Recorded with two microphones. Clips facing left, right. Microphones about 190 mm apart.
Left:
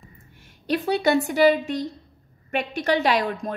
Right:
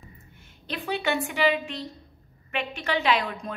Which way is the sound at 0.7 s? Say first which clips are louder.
Left 7 dB; 40° left (ahead or behind).